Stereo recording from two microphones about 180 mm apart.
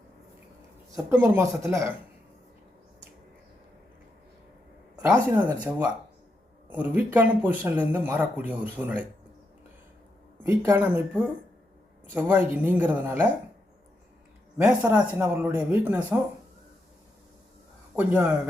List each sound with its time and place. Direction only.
0.9 s speech: 10° right (ahead or behind)
4.9 s speech: 10° right (ahead or behind)
10.4 s speech: 15° right (ahead or behind)
12.1 s speech: 10° right (ahead or behind)
14.7 s speech: 5° right (ahead or behind)
17.9 s speech: 10° right (ahead or behind)